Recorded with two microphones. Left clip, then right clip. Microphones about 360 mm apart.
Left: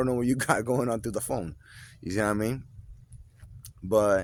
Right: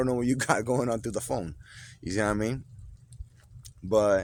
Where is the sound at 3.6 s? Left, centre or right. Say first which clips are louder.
Even; left.